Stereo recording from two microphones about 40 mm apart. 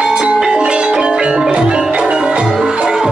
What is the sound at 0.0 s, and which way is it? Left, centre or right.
Music, right.